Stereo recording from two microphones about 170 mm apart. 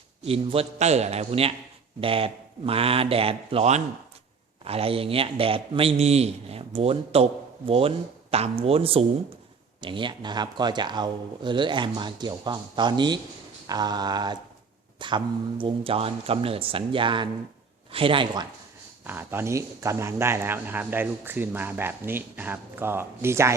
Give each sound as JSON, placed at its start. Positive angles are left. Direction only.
{"t": 0.3, "sound": "a man's voice", "side_deg": -35}
{"t": 19.0, "sound": "speech", "side_deg": -10}